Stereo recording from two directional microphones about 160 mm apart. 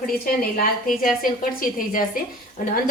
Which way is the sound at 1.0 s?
60° left (ahead or behind).